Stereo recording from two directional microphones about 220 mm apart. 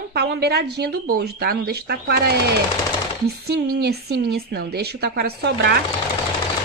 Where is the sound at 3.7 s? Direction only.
50° right (ahead or behind).